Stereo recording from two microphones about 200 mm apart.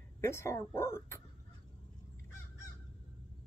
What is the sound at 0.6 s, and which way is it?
Speech, 10° left (ahead or behind).